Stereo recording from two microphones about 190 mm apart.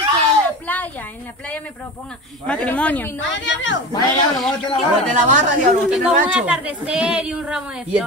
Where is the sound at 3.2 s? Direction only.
75° left (ahead or behind).